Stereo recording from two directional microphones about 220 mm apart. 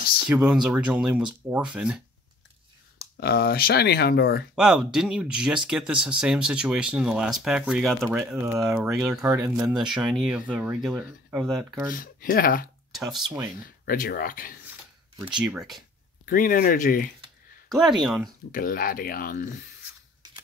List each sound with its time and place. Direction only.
0.3 s speech: 5° right (ahead or behind)
3.2 s speech: 45° left (ahead or behind)
4.6 s speech: 5° right (ahead or behind)
9.2 s speech: 15° right (ahead or behind)
11.9 s speech: 40° left (ahead or behind)
12.9 s speech: centre (ahead or behind)
13.8 s speech: 40° left (ahead or behind)
15.5 s speech: centre (ahead or behind)
16.3 s speech: 40° left (ahead or behind)
17.6 s speech: centre (ahead or behind)
18.5 s speech: 40° left (ahead or behind)